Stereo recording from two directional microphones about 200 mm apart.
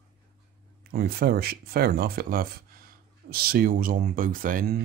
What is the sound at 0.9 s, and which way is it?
Speech, 50° right (ahead or behind).